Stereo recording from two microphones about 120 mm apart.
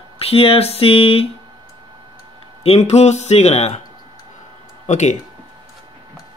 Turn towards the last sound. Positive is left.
turn(degrees=85)